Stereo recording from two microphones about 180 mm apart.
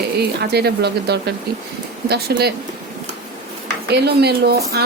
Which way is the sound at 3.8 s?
65° right (ahead or behind).